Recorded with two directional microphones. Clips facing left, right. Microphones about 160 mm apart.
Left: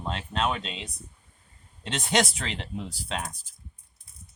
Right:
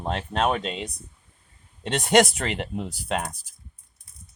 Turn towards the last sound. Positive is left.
turn(degrees=-50)  # may be behind; listen again after turning